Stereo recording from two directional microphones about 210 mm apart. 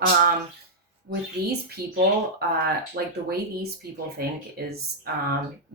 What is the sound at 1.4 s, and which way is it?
Speech, 50° right (ahead or behind).